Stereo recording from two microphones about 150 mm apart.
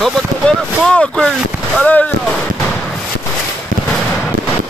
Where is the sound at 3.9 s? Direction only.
5° left (ahead or behind).